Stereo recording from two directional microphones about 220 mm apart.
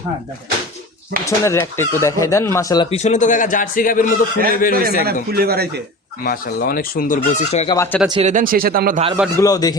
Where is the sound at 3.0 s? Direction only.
35° left (ahead or behind).